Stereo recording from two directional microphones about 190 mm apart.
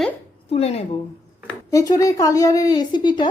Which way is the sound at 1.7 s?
20° left (ahead or behind).